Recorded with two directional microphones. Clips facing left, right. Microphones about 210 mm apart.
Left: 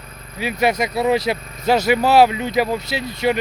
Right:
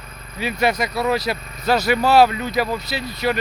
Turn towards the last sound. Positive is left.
turn(degrees=15)  # may be behind; listen again after turning